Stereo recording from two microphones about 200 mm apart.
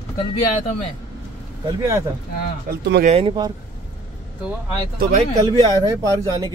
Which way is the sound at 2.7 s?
50° right (ahead or behind).